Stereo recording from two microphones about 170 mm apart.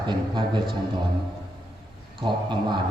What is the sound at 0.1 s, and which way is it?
Speech, 25° right (ahead or behind).